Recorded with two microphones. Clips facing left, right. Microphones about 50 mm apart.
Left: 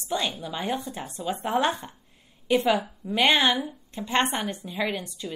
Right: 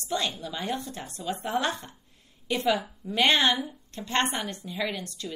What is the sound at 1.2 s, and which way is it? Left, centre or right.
Speech, left.